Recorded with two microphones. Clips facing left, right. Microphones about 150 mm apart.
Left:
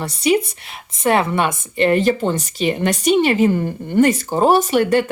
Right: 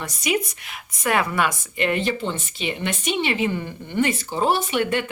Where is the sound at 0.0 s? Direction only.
30° left (ahead or behind).